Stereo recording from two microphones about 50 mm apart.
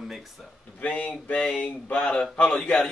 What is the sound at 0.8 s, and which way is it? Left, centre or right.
Speech, left.